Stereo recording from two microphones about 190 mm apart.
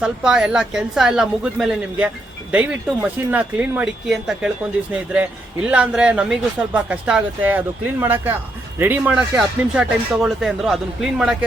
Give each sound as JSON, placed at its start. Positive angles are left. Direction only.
{"t": 0.0, "sound": "speech", "side_deg": -5}